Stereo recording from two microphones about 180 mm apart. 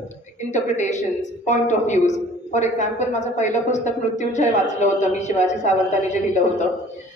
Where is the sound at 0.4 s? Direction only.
40° left (ahead or behind).